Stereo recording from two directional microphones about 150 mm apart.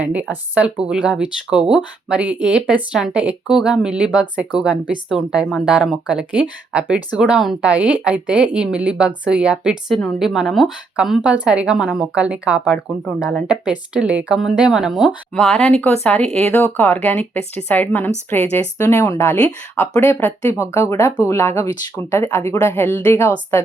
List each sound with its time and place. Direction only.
0.0 s a woman's voice: 10° right (ahead or behind)
15.4 s a woman's voice: 10° left (ahead or behind)